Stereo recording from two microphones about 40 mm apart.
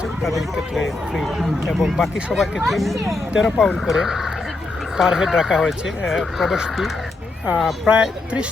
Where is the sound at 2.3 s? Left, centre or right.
Centre.